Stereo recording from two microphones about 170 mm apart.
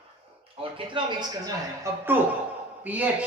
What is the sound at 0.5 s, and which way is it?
A man's voice, 30° right (ahead or behind).